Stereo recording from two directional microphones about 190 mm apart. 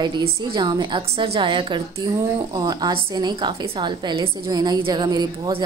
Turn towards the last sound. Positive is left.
turn(degrees=-20)  # may be behind; listen again after turning